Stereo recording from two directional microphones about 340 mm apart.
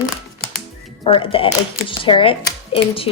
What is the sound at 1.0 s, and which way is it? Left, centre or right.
Speech, centre.